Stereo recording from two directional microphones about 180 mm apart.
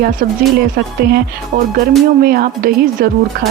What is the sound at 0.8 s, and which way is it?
A woman's voice, 60° right (ahead or behind).